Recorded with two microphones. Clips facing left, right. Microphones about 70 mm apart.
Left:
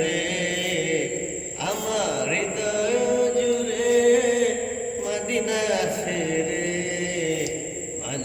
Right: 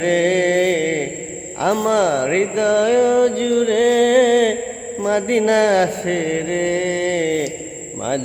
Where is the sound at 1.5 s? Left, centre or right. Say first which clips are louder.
Right 10 dB; right.